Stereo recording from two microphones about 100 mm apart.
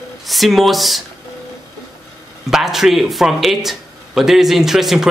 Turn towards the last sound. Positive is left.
turn(degrees=-5)  # may be behind; listen again after turning